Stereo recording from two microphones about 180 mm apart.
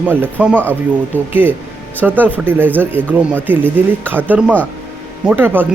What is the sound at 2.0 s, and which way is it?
Speech, 10° right (ahead or behind).